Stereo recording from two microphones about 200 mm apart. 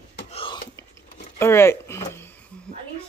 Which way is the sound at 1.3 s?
10° left (ahead or behind).